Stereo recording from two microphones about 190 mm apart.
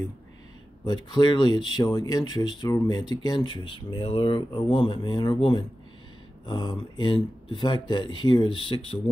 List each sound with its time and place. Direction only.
0.8 s speech: 25° left (ahead or behind)